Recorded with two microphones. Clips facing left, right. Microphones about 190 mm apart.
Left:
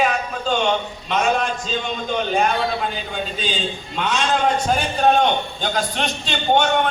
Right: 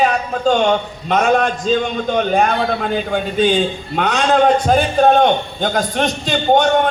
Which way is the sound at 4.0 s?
60° right (ahead or behind).